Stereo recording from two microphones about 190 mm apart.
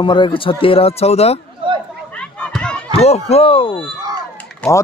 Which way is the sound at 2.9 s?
30° left (ahead or behind).